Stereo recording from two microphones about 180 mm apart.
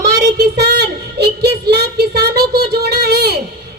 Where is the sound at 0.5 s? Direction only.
65° right (ahead or behind).